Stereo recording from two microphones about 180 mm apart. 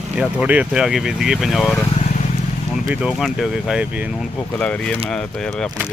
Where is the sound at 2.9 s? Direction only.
5° right (ahead or behind).